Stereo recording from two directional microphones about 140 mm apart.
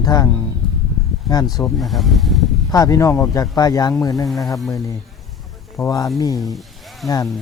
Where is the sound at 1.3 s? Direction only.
Centre (ahead or behind).